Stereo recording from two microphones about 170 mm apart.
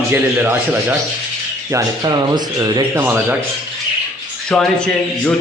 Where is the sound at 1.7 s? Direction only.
25° right (ahead or behind).